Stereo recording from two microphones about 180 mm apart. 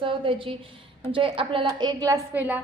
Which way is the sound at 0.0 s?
30° right (ahead or behind).